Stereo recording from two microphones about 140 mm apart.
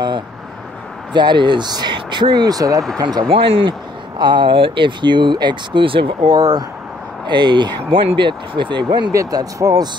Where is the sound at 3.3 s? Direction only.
40° right (ahead or behind).